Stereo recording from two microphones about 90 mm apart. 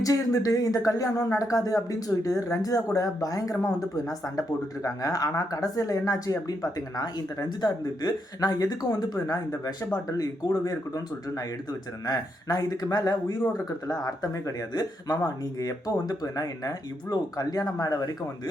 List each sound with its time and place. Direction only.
0.0 s speech: 40° left (ahead or behind)